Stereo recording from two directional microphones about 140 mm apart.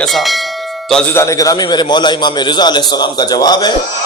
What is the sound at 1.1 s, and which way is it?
A man's voice, 25° left (ahead or behind).